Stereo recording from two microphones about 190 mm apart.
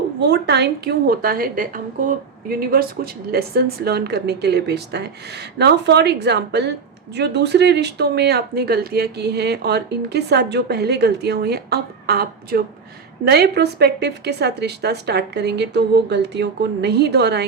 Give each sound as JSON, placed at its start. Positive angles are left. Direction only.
{"t": 0.2, "sound": "speech", "side_deg": -65}